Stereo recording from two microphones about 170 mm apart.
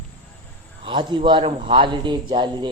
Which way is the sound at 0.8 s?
30° right (ahead or behind).